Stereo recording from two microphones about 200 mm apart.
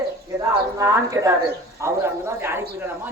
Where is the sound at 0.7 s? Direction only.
15° right (ahead or behind).